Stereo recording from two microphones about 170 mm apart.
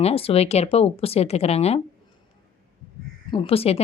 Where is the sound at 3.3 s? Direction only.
35° left (ahead or behind).